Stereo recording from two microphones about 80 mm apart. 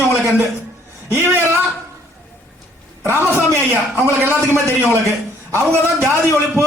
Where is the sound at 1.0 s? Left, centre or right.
Right.